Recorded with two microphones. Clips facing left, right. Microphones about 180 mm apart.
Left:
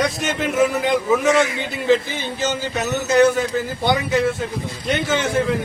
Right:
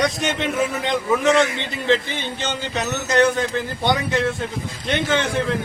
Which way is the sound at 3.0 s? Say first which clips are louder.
Left 3 dB; 5° left (ahead or behind).